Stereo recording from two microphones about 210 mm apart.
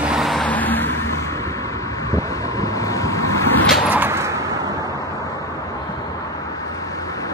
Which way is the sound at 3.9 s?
10° right (ahead or behind).